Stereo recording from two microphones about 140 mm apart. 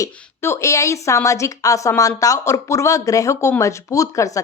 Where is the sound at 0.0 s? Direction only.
20° left (ahead or behind).